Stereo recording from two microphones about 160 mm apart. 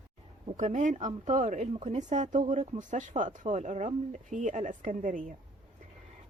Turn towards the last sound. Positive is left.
turn(degrees=-55)  # may be behind; listen again after turning